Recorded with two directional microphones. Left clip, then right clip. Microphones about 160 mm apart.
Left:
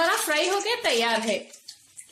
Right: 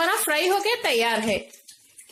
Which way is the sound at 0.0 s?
40° right (ahead or behind).